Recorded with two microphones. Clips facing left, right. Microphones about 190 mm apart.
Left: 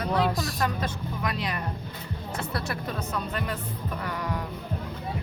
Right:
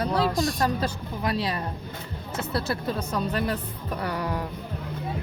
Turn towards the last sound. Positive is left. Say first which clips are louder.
# right 3 dB
turn(degrees=-35)  # may be behind; listen again after turning